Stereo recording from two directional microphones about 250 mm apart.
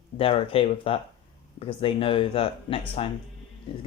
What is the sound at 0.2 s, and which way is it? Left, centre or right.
Speech, left.